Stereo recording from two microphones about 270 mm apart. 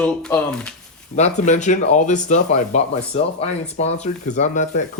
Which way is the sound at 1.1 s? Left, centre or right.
Left.